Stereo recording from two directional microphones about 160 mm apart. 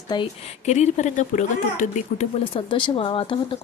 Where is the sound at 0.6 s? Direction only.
45° left (ahead or behind).